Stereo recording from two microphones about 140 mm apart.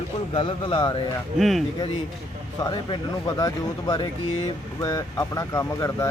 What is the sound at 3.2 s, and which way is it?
Speech, 25° left (ahead or behind).